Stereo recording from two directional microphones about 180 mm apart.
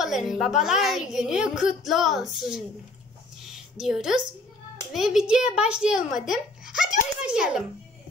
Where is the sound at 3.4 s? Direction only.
5° right (ahead or behind).